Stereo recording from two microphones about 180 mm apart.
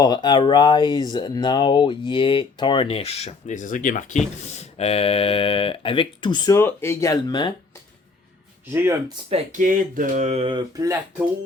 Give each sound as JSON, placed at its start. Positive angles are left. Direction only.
{"t": 0.0, "sound": "speech", "side_deg": 25}
{"t": 8.7, "sound": "speech", "side_deg": -15}
{"t": 9.3, "sound": "speech", "side_deg": -45}